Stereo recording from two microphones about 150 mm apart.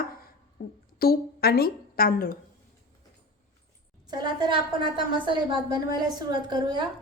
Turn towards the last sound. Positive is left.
turn(degrees=-30)  # may be behind; listen again after turning